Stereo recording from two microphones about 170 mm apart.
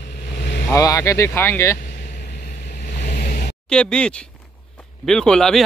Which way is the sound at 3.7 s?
5° left (ahead or behind).